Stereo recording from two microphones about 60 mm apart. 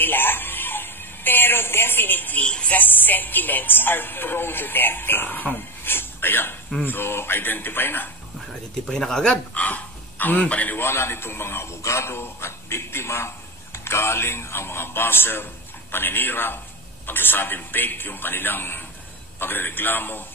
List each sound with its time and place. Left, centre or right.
0.0 s a sound: left
2.4 s a man's voice: centre
2.8 s speech: left
8.8 s speech: centre
9.6 s a sound: left
10.4 s a man's voice: left
10.8 s speech: left